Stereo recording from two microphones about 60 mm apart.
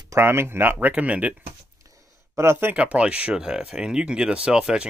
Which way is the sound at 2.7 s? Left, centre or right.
Right.